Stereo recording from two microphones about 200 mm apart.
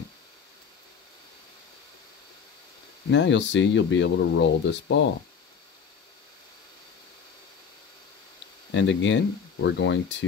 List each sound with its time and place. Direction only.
3.1 s speech: 65° left (ahead or behind)
8.7 s speech: 65° left (ahead or behind)